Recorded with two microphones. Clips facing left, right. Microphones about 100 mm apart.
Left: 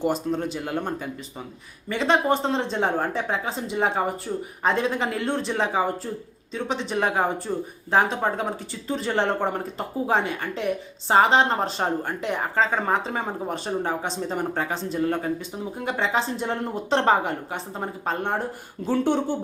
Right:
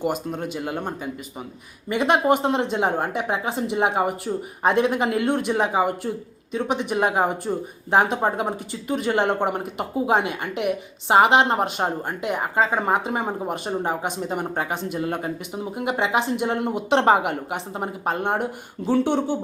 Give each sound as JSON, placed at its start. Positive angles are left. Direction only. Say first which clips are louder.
{"t": 0.0, "sound": "a woman's voice", "louder": "left 1 dB", "side_deg": -5}
{"t": 18.8, "sound": "speech", "louder": "right 3 dB", "side_deg": -30}